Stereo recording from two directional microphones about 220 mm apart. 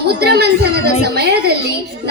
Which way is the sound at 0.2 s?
45° right (ahead or behind).